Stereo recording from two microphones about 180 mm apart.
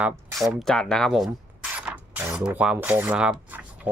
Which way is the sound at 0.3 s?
Centre (ahead or behind).